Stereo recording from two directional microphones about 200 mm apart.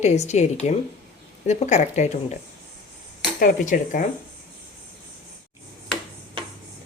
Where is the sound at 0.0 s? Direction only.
35° left (ahead or behind).